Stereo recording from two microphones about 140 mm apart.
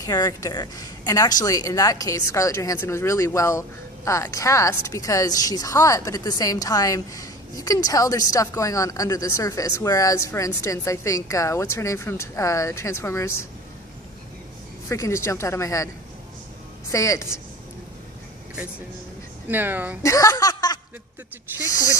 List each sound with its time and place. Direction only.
0.0 s a woman's voice: 25° left (ahead or behind)
14.8 s a woman's voice: 20° left (ahead or behind)
16.9 s a woman's voice: 20° left (ahead or behind)
19.5 s speech: 15° right (ahead or behind)
20.0 s a sound: 25° left (ahead or behind)